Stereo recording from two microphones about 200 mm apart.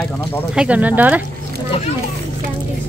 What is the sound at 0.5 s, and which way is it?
Speech, 5° right (ahead or behind).